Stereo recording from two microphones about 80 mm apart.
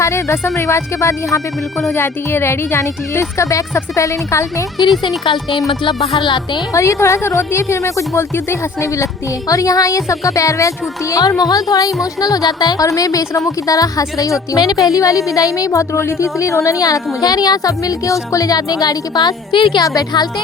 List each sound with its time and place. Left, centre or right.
0.0 s speech: left
5.0 s speech: left
5.5 s music: centre
5.8 s music: left
6.7 s a woman's voice: left
19.8 s a woman's voice: left